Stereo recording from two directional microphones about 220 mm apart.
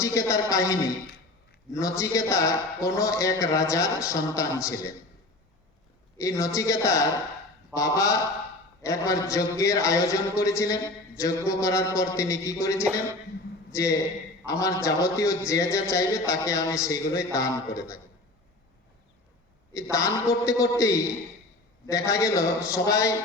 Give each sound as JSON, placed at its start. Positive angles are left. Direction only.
{"t": 0.0, "sound": "speech", "side_deg": 15}
{"t": 6.1, "sound": "speech", "side_deg": 15}
{"t": 12.8, "sound": "a man's voice", "side_deg": -5}
{"t": 13.7, "sound": "speech", "side_deg": 15}
{"t": 19.7, "sound": "speech", "side_deg": 15}